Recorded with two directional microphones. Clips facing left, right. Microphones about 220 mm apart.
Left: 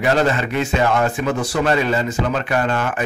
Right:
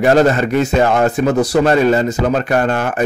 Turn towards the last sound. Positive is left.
turn(degrees=-40)  # may be behind; listen again after turning